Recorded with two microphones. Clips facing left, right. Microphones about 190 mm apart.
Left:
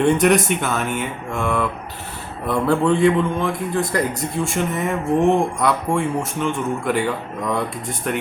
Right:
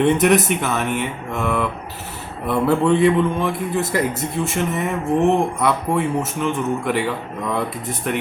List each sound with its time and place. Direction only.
0.0 s a man's voice: centre (ahead or behind)